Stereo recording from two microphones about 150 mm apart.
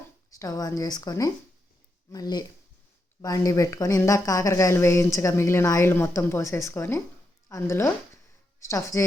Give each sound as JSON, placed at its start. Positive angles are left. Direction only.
{"t": 0.3, "sound": "a woman's voice", "side_deg": 25}